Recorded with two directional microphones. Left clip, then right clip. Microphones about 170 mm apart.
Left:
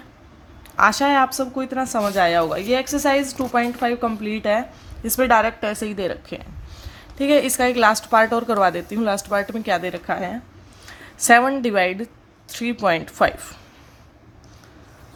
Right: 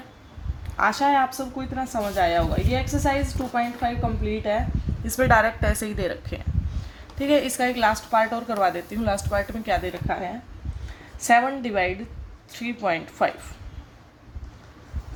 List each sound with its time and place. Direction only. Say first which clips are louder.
0.8 s speech: left 4 dB; 45° left (ahead or behind)
5.0 s a woman's voice: left 2 dB; 30° left (ahead or behind)
7.2 s a woman's voice: left 4 dB; 35° left (ahead or behind)